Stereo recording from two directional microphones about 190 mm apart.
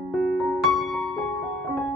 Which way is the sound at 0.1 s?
Centre (ahead or behind).